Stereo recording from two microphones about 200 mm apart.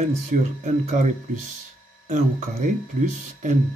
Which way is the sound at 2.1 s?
40° right (ahead or behind).